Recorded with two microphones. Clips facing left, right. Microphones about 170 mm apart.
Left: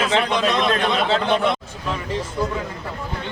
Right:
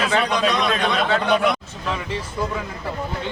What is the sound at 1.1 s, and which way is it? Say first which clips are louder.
Speech: even; 25° left (ahead or behind).